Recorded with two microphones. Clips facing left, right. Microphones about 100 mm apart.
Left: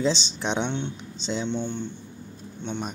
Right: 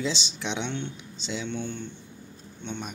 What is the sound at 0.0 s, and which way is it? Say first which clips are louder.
Speech: left 5 dB; 35° left (ahead or behind).